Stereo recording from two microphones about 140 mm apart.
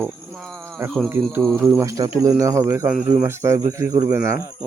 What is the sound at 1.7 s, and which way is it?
Speech, 20° right (ahead or behind).